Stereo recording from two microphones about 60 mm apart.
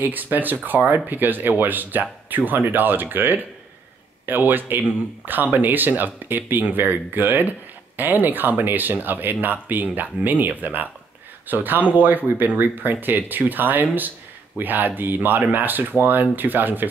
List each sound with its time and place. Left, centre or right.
0.0 s speech: right